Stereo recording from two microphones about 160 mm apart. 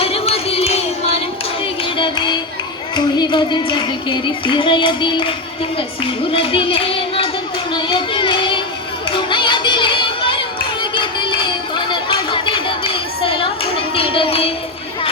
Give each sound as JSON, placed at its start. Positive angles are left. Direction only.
{"t": 0.0, "sound": "music", "side_deg": 40}
{"t": 2.9, "sound": "child singing", "side_deg": 30}
{"t": 6.3, "sound": "music", "side_deg": 35}
{"t": 7.7, "sound": "child singing", "side_deg": 30}
{"t": 9.0, "sound": "crowd", "side_deg": 30}
{"t": 10.9, "sound": "a sound", "side_deg": 30}